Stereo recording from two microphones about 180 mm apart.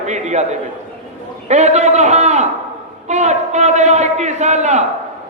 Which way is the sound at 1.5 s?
40° right (ahead or behind).